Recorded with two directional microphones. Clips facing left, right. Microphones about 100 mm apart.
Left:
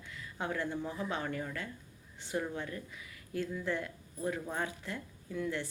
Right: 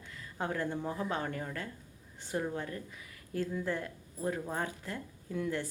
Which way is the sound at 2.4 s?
35° right (ahead or behind).